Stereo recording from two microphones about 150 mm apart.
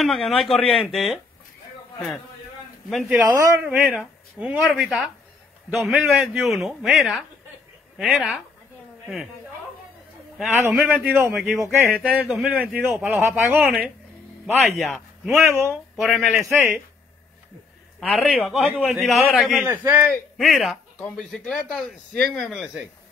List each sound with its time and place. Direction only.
0.0 s speech: centre (ahead or behind)
2.9 s speech: centre (ahead or behind)
3.3 s a man's voice: 20° right (ahead or behind)
3.6 s a woman's voice: 5° right (ahead or behind)
10.7 s a man's voice: 10° right (ahead or behind)
15.3 s a man's voice: 15° right (ahead or behind)
16.0 s speech: centre (ahead or behind)
18.0 s a man's voice: 10° left (ahead or behind)
18.3 s speech: centre (ahead or behind)
19.7 s a man's voice: 15° right (ahead or behind)
20.3 s speech: centre (ahead or behind)